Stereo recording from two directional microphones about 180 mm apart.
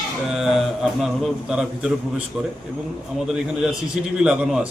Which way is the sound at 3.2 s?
5° right (ahead or behind).